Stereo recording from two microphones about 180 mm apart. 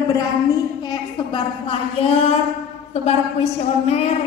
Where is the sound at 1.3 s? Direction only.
30° left (ahead or behind).